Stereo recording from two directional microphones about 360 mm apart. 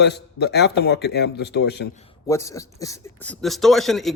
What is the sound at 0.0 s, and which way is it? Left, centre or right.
Speech, left.